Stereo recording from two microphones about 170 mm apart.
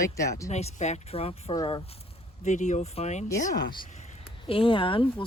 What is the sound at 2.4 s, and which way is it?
Speech, 45° left (ahead or behind).